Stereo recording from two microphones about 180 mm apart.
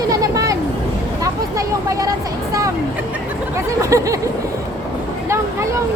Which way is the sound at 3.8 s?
15° right (ahead or behind).